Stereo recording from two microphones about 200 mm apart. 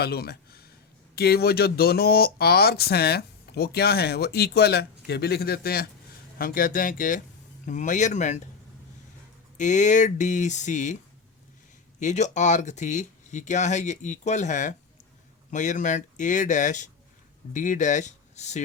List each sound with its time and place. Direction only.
0.0 s speech: 50° left (ahead or behind)
9.6 s speech: 40° left (ahead or behind)
11.9 s speech: 35° left (ahead or behind)